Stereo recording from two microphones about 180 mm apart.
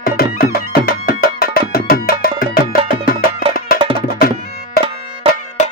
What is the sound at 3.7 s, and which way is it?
Music, 30° right (ahead or behind).